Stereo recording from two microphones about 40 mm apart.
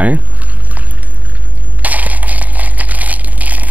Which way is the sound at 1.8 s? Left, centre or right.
Right.